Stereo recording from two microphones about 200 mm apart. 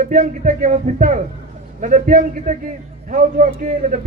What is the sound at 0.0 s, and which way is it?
A man's voice, 40° right (ahead or behind).